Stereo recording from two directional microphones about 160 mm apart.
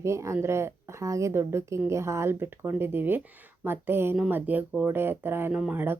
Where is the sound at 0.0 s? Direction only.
20° right (ahead or behind).